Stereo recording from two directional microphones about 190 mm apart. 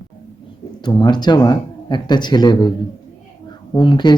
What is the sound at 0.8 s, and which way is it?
Speech, 20° left (ahead or behind).